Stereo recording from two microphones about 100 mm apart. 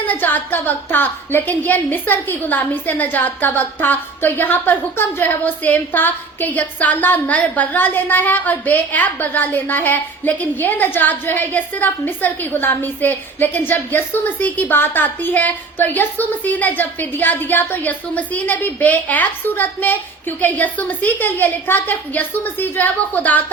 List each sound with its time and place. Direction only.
0.1 s a woman's voice: 15° left (ahead or behind)